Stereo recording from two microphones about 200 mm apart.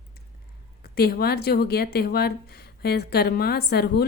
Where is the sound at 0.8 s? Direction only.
50° left (ahead or behind).